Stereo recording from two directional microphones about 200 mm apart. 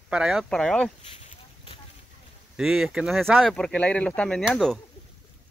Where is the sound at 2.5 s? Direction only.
Centre (ahead or behind).